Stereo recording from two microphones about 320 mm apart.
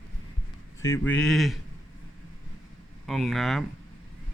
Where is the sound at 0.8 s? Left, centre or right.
Centre.